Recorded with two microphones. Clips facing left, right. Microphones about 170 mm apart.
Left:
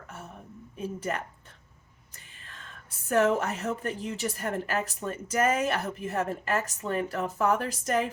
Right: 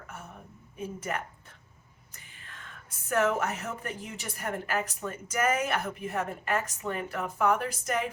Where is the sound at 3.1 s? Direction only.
35° left (ahead or behind).